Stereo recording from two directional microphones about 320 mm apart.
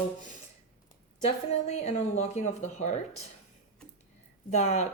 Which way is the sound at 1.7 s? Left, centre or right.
Left.